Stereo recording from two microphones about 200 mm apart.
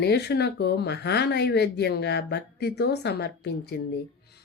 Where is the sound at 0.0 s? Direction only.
55° left (ahead or behind).